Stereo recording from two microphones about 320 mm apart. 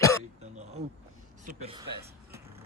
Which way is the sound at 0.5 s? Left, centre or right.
Right.